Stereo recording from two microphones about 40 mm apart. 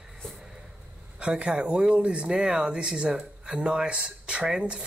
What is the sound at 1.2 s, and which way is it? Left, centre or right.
Speech, right.